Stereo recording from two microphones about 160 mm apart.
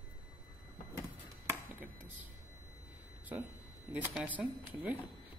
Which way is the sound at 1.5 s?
10° right (ahead or behind).